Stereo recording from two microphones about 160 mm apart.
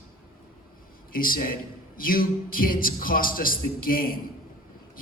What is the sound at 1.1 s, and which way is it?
Speech, 60° left (ahead or behind).